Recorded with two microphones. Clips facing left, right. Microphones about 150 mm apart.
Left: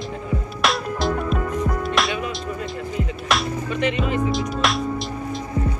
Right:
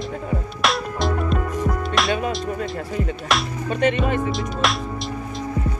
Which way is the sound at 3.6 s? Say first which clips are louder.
Right 5 dB; 45° right (ahead or behind).